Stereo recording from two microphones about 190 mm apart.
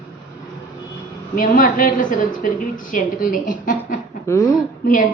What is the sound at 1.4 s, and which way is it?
A woman's voice, 45° left (ahead or behind).